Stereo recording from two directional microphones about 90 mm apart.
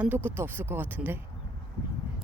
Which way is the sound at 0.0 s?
20° right (ahead or behind).